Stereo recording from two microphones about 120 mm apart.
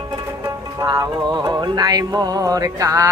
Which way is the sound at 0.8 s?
35° right (ahead or behind).